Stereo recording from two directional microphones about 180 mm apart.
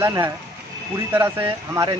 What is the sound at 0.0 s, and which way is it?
Speech, 15° right (ahead or behind).